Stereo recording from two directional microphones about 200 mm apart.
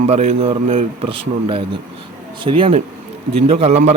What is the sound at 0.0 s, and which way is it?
A man's voice, 35° right (ahead or behind).